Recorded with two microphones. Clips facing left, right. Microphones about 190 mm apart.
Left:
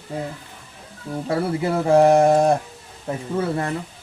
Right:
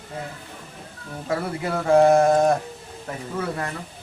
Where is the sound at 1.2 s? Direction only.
30° left (ahead or behind).